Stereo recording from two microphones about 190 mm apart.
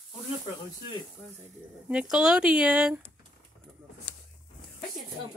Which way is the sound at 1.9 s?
5° right (ahead or behind).